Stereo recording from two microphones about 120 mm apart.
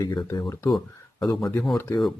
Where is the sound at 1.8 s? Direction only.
20° left (ahead or behind).